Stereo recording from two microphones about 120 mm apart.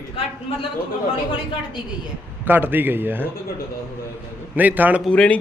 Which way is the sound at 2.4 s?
15° right (ahead or behind).